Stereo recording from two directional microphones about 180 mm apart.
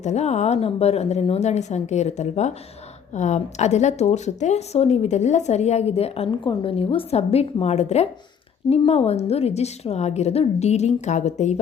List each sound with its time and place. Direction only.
0.0 s a woman's voice: 40° left (ahead or behind)